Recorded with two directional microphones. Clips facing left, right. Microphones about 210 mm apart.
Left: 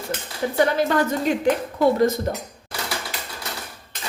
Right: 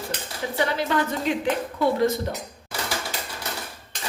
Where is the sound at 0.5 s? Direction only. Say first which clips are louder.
Left 4 dB; 45° left (ahead or behind).